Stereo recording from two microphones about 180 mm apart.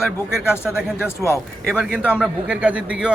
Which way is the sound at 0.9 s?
15° left (ahead or behind).